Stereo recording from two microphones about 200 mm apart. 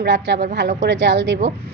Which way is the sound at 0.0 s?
60° right (ahead or behind).